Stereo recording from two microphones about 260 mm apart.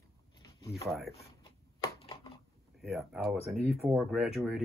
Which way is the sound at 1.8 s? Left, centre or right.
Left.